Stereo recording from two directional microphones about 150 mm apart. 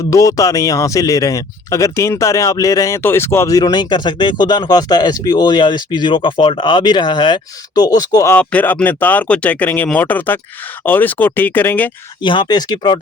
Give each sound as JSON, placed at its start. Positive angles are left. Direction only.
{"t": 0.1, "sound": "speech", "side_deg": 20}
{"t": 8.4, "sound": "speech", "side_deg": 10}
{"t": 12.2, "sound": "speech", "side_deg": 30}